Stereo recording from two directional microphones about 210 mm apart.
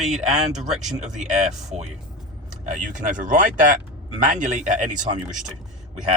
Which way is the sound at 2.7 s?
35° right (ahead or behind).